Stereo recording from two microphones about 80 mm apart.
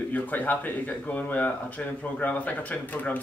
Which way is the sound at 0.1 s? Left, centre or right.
Left.